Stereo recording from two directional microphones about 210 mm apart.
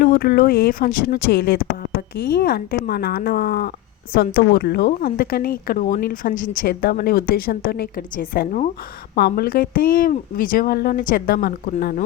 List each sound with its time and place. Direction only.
0.0 s a woman's voice: 45° left (ahead or behind)